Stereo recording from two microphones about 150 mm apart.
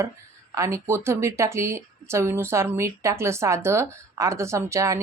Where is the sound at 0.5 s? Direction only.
20° right (ahead or behind).